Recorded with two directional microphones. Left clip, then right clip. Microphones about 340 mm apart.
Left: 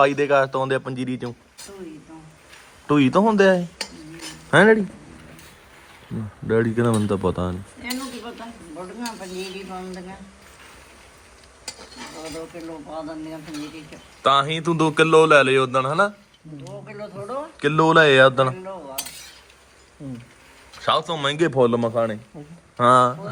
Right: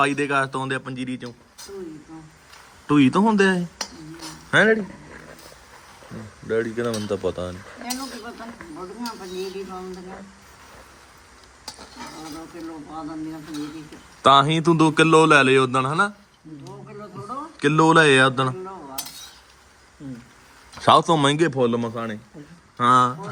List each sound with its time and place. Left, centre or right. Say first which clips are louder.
0.0 s a man's voice: left 4 dB; centre
2.8 s speech: left 1 dB; centre
6.5 s cutlery: left 3 dB; centre
11.8 s stir: left 1 dB; centre
14.2 s a man's voice: right 3 dB; centre
17.6 s speech: even; centre
20.8 s a man's voice: right 5 dB; centre